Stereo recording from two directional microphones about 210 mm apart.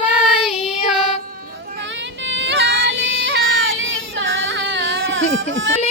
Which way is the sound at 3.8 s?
65° right (ahead or behind).